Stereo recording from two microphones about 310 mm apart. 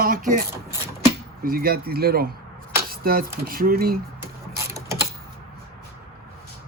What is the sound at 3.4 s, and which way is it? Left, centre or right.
Speech, right.